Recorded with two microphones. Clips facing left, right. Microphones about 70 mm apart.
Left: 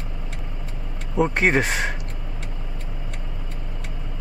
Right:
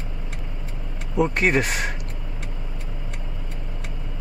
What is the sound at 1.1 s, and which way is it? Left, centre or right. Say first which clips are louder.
Speech: left 1 dB; left.